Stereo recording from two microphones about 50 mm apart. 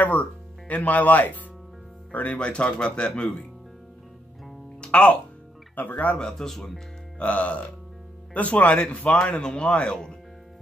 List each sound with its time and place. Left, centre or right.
0.0 s speech: left
2.3 s speech: left
4.7 s music: left
5.8 s speech: left
6.1 s speech: centre
7.2 s speech: left